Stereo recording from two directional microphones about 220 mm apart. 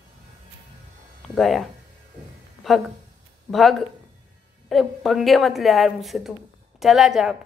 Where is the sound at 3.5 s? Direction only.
Centre (ahead or behind).